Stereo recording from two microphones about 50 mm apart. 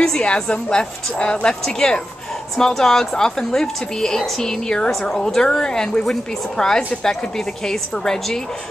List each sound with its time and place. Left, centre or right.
0.0 s a woman's voice: centre